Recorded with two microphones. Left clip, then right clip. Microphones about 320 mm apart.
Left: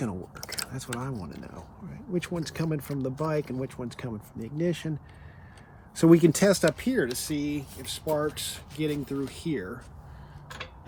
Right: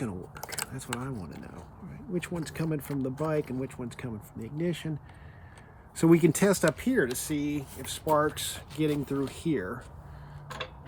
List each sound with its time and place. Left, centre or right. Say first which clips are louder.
0.0 s a sound: left 2 dB; centre
0.7 s speech: left 1 dB; centre
6.0 s speech: left 3 dB; centre